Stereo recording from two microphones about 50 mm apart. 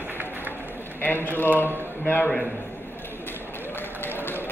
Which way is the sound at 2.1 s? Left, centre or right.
Left.